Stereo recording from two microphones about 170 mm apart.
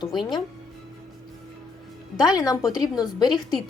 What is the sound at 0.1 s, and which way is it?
Speech, centre (ahead or behind).